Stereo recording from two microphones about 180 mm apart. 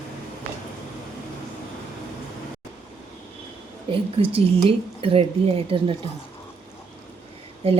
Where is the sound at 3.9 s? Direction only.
30° right (ahead or behind).